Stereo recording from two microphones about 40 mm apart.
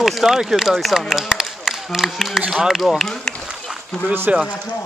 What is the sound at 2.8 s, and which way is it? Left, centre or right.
Speech, centre.